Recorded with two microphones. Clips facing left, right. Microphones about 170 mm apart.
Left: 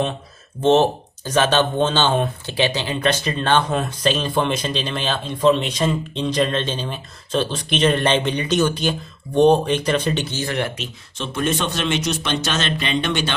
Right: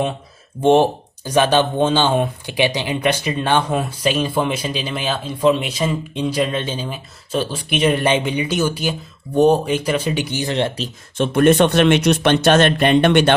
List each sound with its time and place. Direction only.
0.6 s speech: 15° right (ahead or behind)
11.2 s speech: 60° right (ahead or behind)